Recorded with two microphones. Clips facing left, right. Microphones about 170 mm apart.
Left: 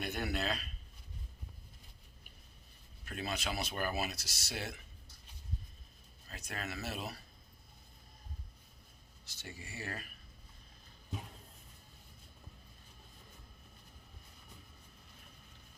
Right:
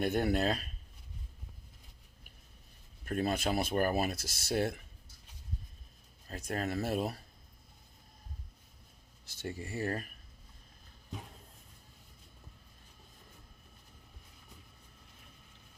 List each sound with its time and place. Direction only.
0.0 s speech: 50° right (ahead or behind)
3.0 s speech: 50° right (ahead or behind)
6.2 s speech: 50° right (ahead or behind)
9.4 s speech: 50° right (ahead or behind)